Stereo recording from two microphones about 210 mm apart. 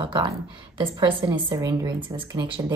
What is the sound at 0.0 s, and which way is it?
A woman's voice, 20° right (ahead or behind).